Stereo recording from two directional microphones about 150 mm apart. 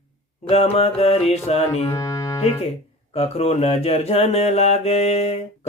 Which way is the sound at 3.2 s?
45° left (ahead or behind).